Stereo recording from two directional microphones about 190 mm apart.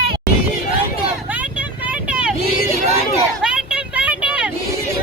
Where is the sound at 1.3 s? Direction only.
10° right (ahead or behind).